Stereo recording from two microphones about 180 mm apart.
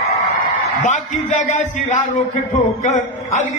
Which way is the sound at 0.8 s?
45° left (ahead or behind).